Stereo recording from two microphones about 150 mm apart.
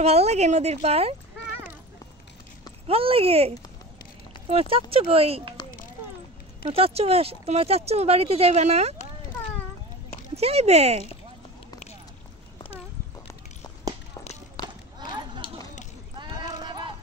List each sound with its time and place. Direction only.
0.0 s speech: 45° right (ahead or behind)
2.9 s speech: 40° right (ahead or behind)
6.7 s speech: 40° right (ahead or behind)
10.3 s speech: 45° right (ahead or behind)
12.5 s clip-clop: 40° left (ahead or behind)
14.6 s horse: 25° left (ahead or behind)
15.0 s a sound: 30° right (ahead or behind)